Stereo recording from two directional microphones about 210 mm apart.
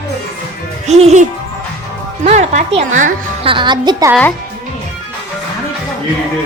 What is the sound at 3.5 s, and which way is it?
Speech, 20° right (ahead or behind).